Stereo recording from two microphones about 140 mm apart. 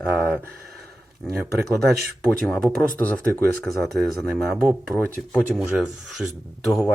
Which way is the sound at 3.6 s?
Centre (ahead or behind).